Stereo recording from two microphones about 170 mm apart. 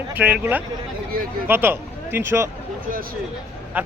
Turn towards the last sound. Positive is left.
turn(degrees=-10)  # may be behind; listen again after turning